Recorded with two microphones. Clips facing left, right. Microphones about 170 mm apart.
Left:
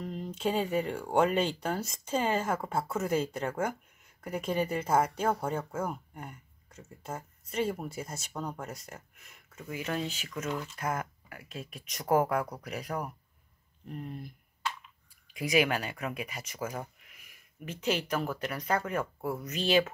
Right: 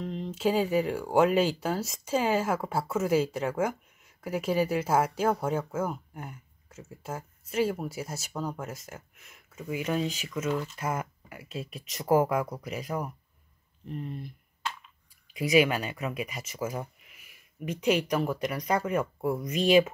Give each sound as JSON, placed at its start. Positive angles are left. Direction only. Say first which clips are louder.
{"t": 0.0, "sound": "speech", "louder": "right 4 dB", "side_deg": 5}
{"t": 15.3, "sound": "speech", "louder": "right 4 dB", "side_deg": -10}